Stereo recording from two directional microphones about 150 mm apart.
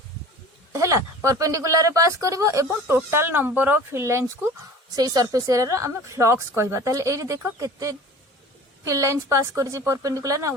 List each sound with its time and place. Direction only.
0.7 s speech: 20° right (ahead or behind)